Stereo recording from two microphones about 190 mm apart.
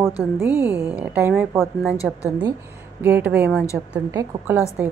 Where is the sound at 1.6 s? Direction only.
Centre (ahead or behind).